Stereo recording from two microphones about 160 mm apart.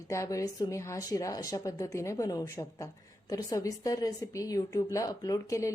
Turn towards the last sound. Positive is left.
turn(degrees=20)  # may be behind; listen again after turning